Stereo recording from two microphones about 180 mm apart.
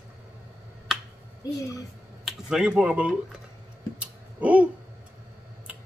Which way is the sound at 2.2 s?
5° right (ahead or behind).